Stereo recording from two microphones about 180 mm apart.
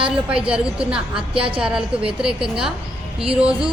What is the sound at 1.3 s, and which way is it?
Speech, 30° right (ahead or behind).